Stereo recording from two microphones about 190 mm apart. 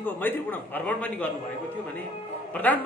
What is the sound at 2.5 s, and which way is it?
Speech, 10° left (ahead or behind).